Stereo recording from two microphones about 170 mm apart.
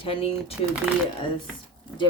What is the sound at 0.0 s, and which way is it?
Speech, 35° left (ahead or behind).